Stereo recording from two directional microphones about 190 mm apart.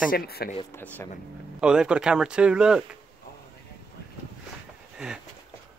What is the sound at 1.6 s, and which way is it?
Speech, 5° right (ahead or behind).